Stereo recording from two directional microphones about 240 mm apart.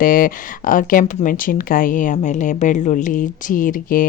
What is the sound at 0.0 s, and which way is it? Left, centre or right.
A woman's voice, left.